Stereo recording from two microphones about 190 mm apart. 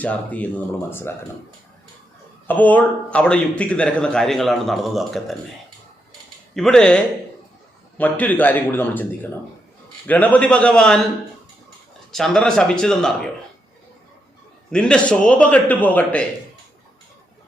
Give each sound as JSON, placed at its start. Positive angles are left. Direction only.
{"t": 0.0, "sound": "a man's voice", "side_deg": 10}
{"t": 2.5, "sound": "a man's voice", "side_deg": 10}
{"t": 6.5, "sound": "a man's voice", "side_deg": 5}
{"t": 12.1, "sound": "a man's voice", "side_deg": 0}
{"t": 14.7, "sound": "a man's voice", "side_deg": 5}